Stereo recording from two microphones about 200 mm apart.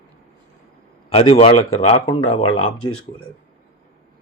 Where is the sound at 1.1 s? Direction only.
30° left (ahead or behind).